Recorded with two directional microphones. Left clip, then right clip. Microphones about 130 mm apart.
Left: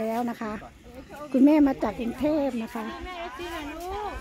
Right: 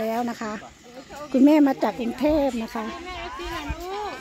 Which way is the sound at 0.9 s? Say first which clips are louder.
Right 3 dB; 90° right.